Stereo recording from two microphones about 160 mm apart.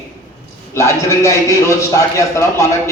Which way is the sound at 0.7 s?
20° left (ahead or behind).